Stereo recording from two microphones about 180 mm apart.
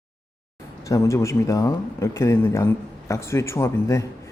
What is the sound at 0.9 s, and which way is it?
Speech, 15° left (ahead or behind).